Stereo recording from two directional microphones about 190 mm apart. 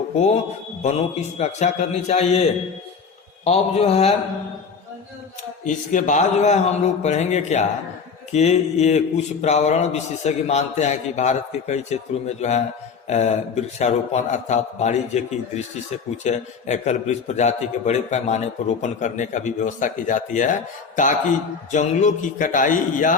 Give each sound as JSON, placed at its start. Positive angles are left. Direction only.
{"t": 0.8, "sound": "mantra", "side_deg": 35}
{"t": 3.4, "sound": "mantra", "side_deg": 35}
{"t": 5.6, "sound": "mantra", "side_deg": 40}
{"t": 20.9, "sound": "a man's voice", "side_deg": 40}